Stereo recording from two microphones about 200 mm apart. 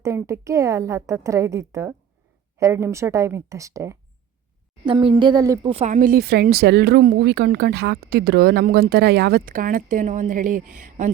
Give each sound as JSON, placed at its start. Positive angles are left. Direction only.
{"t": 0.0, "sound": "a woman's voice", "side_deg": -15}
{"t": 5.7, "sound": "speech", "side_deg": -35}